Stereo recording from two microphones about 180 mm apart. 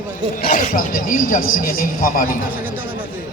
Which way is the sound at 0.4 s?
45° left (ahead or behind).